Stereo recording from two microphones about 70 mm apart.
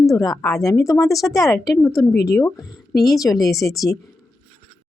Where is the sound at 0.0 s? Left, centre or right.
Left.